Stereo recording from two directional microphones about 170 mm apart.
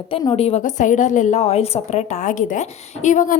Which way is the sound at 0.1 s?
30° left (ahead or behind).